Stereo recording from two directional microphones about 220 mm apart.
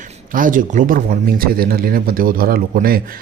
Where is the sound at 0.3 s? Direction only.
40° right (ahead or behind).